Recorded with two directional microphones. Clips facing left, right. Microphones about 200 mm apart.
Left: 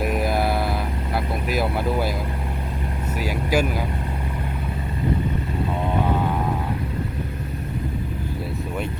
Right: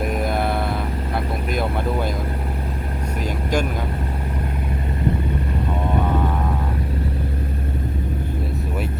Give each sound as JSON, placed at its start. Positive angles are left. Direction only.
{"t": 0.0, "sound": "mantra", "side_deg": 5}
{"t": 1.5, "sound": "vehicle", "side_deg": 5}
{"t": 3.2, "sound": "vehicle", "side_deg": 5}